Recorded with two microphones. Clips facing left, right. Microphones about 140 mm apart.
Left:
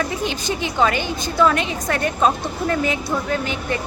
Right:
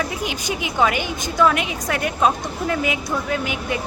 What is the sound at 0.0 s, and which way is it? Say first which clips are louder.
A woman's voice: left 2 dB; 5° right (ahead or behind).